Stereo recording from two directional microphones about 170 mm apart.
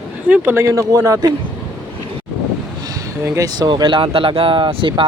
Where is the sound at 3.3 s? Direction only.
20° right (ahead or behind).